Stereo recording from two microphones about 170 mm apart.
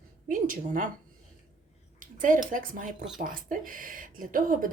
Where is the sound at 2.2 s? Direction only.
50° right (ahead or behind).